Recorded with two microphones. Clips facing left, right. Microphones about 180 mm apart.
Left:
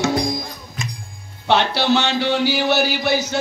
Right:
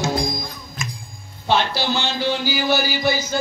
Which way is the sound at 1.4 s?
70° left (ahead or behind).